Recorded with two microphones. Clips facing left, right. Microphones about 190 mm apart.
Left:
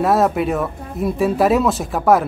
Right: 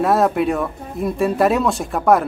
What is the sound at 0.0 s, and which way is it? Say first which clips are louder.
Speech: even; centre (ahead or behind).